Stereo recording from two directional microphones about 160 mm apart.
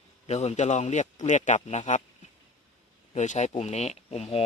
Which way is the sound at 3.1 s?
45° left (ahead or behind).